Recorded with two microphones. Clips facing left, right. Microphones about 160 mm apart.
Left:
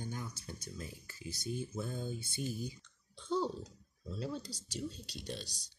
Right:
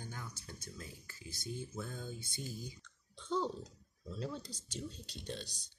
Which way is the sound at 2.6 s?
10° left (ahead or behind).